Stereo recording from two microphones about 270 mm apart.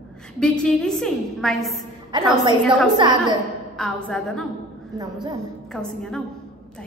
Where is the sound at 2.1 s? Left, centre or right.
Centre.